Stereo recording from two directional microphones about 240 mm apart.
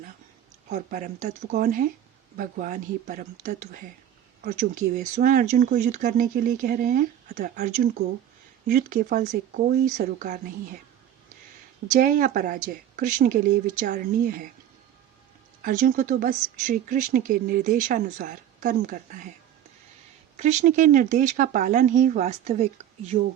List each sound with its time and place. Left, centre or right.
0.7 s speech: right
11.9 s speech: right
15.6 s speech: right
20.3 s speech: right